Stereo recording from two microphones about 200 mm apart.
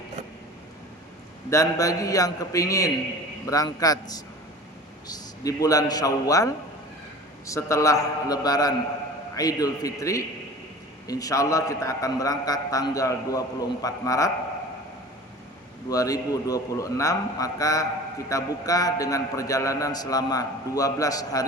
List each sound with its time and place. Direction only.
1.5 s a man's voice: 15° left (ahead or behind)
15.9 s a man's voice: 15° left (ahead or behind)